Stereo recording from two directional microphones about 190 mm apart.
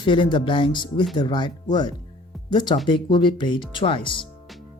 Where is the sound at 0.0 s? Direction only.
25° left (ahead or behind).